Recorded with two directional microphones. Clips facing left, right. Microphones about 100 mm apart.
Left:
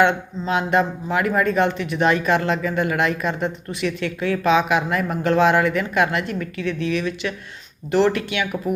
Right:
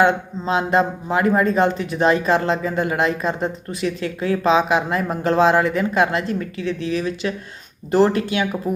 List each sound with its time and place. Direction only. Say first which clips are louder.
0.0 s speech: right 1 dB; 30° right (ahead or behind)